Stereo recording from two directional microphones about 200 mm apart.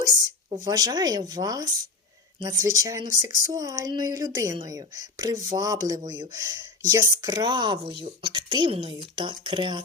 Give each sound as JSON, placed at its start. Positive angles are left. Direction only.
{"t": 0.6, "sound": "speech", "side_deg": -20}